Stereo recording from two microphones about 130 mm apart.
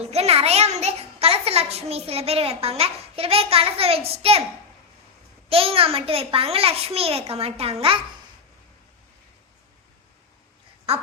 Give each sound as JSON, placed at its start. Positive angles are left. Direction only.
{"t": 0.0, "sound": "a child's voice", "side_deg": -55}
{"t": 5.5, "sound": "a child's voice", "side_deg": -45}